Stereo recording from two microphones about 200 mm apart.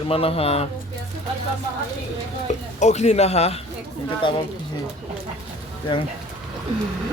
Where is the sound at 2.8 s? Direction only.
35° left (ahead or behind).